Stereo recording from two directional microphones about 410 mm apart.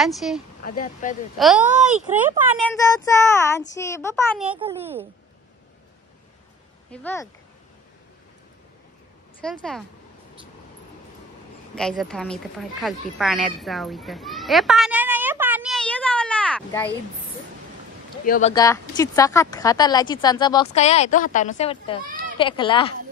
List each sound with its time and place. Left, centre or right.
0.0 s speech: centre
0.7 s speech: centre
1.4 s speech: centre
3.7 s speech: centre
4.6 s a child's voice: centre
6.9 s speech: centre
9.4 s speech: centre
11.7 s speech: centre
18.2 s speech: centre